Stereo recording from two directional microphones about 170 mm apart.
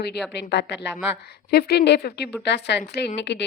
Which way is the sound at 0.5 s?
90° left.